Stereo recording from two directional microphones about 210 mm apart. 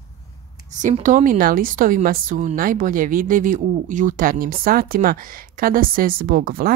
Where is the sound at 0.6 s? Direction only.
35° right (ahead or behind).